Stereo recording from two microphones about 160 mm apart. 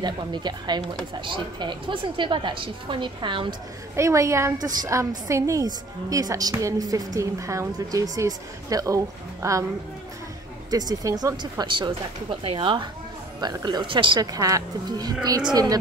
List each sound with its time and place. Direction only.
0.0 s a woman's voice: 25° right (ahead or behind)
3.9 s a woman's voice: 20° right (ahead or behind)
10.7 s a woman's voice: 25° right (ahead or behind)